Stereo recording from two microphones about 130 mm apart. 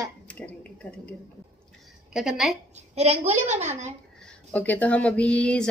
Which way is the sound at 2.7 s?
55° right (ahead or behind).